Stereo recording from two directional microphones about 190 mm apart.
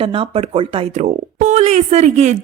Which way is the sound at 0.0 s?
30° right (ahead or behind).